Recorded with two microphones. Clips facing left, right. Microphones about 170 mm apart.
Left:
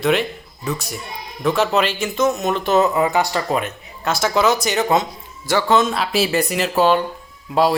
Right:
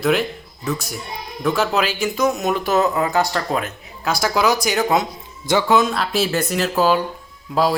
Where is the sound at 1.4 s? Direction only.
5° right (ahead or behind).